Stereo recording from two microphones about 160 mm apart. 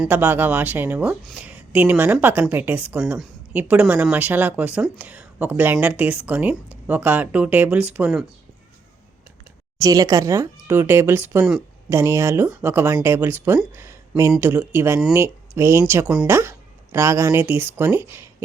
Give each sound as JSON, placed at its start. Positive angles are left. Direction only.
{"t": 0.1, "sound": "speech", "side_deg": -10}
{"t": 9.7, "sound": "speech", "side_deg": -20}